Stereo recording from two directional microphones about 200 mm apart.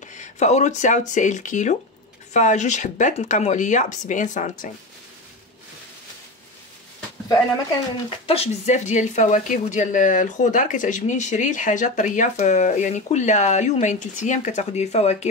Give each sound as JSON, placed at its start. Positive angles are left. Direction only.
{"t": 0.0, "sound": "speech", "side_deg": 35}
{"t": 8.3, "sound": "speech", "side_deg": 30}